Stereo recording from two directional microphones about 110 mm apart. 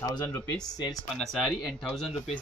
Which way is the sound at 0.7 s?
35° left (ahead or behind).